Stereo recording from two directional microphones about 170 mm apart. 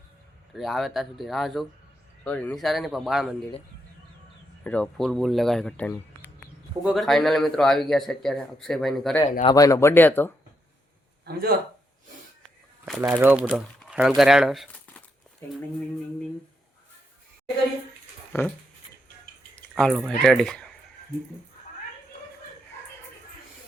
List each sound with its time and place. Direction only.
0.5 s a man's voice: centre (ahead or behind)
4.6 s a man's voice: 5° left (ahead or behind)
9.4 s speech: 25° left (ahead or behind)
11.3 s a man's voice: 65° right (ahead or behind)
13.0 s speech: 15° right (ahead or behind); by 15.0 s centre (ahead or behind)
18.3 s speech: 15° left (ahead or behind)
19.5 s a sound: 5° left (ahead or behind)
20.1 s a man's voice: 5° left (ahead or behind)